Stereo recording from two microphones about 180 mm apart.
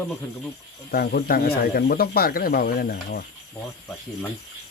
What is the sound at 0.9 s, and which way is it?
Speech, 60° left (ahead or behind).